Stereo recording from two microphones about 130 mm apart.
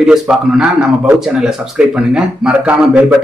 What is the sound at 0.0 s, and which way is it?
A man's voice, 5° right (ahead or behind).